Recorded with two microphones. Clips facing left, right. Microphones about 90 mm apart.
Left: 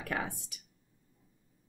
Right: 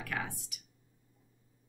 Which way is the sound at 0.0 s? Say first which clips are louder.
Left 2 dB; 30° left (ahead or behind).